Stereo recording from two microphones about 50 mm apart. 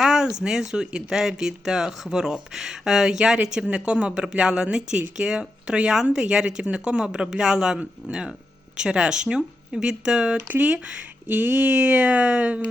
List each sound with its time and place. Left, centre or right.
0.0 s speech: centre; by 11.0 s right
11.3 s speech: right